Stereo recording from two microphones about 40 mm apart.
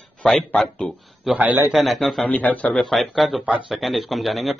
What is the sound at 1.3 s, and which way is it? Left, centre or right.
Speech, centre.